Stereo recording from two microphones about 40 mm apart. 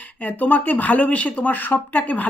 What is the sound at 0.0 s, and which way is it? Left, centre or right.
Speech, left.